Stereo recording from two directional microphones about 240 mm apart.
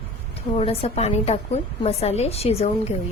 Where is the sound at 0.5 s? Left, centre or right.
Left.